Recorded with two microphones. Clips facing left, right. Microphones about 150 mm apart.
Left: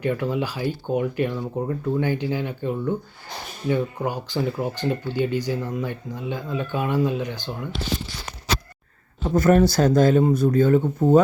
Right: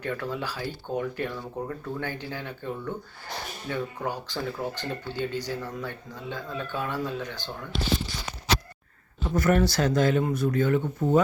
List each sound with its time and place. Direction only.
0.0 s speech: 15° left (ahead or behind)
9.2 s speech: 40° left (ahead or behind)